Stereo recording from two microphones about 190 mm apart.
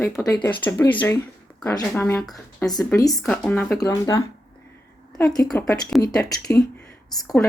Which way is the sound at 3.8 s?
20° left (ahead or behind).